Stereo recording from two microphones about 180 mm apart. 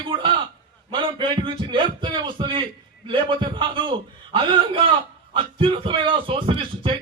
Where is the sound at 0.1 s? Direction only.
30° right (ahead or behind).